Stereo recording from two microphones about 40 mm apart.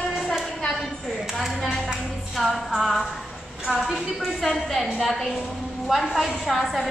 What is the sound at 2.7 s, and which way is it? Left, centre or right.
Speech, centre.